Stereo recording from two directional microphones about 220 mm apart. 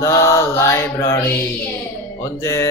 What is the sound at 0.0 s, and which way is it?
Mantra, 15° left (ahead or behind).